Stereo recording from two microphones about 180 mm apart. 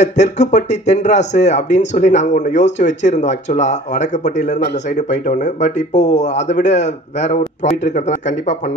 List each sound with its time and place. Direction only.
0.0 s speech: 40° left (ahead or behind)